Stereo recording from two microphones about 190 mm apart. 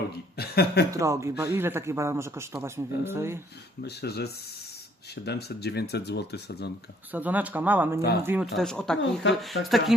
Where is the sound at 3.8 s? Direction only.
60° left (ahead or behind).